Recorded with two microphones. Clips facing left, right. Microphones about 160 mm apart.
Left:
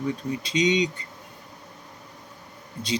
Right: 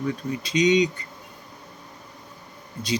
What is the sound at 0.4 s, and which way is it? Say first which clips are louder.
Speech: right 4 dB; 25° left (ahead or behind).